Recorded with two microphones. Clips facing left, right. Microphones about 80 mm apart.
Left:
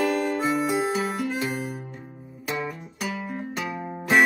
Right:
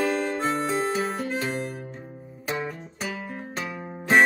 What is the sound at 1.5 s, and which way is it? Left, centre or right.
Music, centre.